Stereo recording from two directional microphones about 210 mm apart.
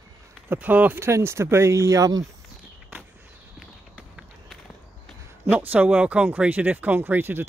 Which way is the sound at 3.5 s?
5° right (ahead or behind).